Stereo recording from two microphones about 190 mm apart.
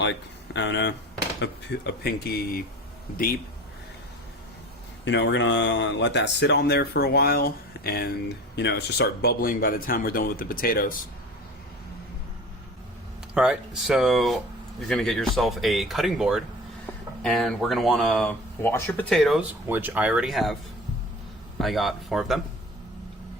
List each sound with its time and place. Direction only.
0.0 s speech: 70° left (ahead or behind); by 2.6 s 50° left (ahead or behind)
5.0 s speech: 70° left (ahead or behind); by 11.0 s 50° left (ahead or behind)
13.3 s speech: 5° right (ahead or behind)
21.6 s speech: centre (ahead or behind)